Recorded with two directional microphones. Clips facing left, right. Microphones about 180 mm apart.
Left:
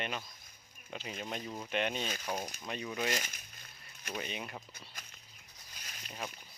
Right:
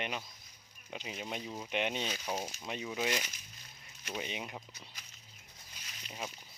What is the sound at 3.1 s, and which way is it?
Speech, 45° left (ahead or behind).